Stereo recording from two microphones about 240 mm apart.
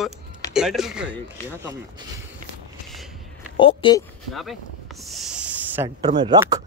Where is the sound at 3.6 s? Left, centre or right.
Left.